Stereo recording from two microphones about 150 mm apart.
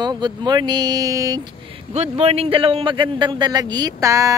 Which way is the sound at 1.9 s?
45° right (ahead or behind).